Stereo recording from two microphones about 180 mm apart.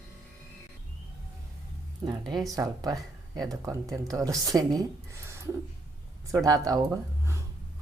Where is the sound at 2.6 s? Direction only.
20° right (ahead or behind).